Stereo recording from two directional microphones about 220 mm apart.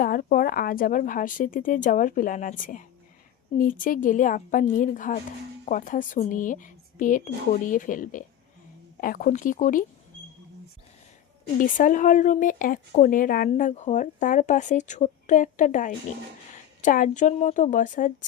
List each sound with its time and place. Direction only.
0.0 s speech: 40° left (ahead or behind)
11.6 s speech: 35° left (ahead or behind)